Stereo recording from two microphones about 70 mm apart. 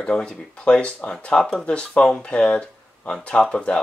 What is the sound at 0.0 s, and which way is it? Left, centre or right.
Speech, centre.